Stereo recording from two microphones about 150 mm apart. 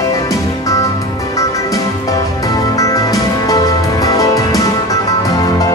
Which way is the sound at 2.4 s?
20° left (ahead or behind).